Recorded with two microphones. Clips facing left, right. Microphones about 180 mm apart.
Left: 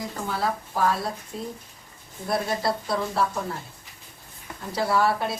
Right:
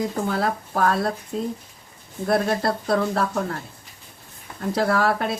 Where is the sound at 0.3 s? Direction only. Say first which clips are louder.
Right 4 dB; 60° right (ahead or behind).